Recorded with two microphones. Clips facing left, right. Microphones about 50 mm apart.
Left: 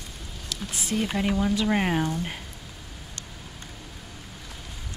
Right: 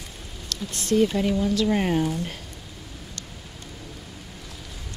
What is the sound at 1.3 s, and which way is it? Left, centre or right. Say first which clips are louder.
Speech: right 2 dB; left.